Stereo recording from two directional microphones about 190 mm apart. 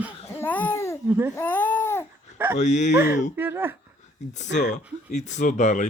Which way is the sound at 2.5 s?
40° left (ahead or behind).